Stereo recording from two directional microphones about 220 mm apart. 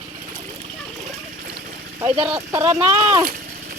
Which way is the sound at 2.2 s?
15° right (ahead or behind).